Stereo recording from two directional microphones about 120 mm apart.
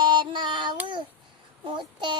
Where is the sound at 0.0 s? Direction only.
40° right (ahead or behind).